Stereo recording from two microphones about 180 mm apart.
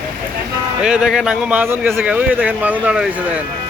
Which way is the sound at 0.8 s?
5° right (ahead or behind).